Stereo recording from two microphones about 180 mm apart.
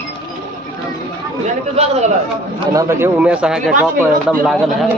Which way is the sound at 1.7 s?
35° right (ahead or behind).